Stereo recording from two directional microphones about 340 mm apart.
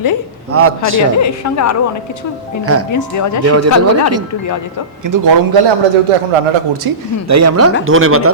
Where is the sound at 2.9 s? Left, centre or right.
Left.